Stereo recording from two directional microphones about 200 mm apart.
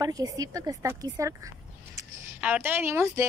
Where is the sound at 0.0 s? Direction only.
20° right (ahead or behind).